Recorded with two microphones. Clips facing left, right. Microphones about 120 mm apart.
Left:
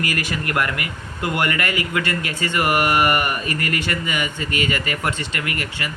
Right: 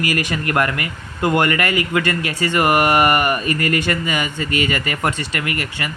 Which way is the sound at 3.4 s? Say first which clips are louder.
Right 5 dB; 25° left (ahead or behind).